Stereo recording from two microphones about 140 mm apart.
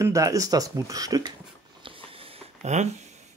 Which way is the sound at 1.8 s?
40° right (ahead or behind).